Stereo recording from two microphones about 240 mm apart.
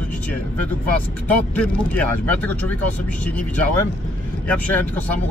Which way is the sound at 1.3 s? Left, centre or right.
Centre.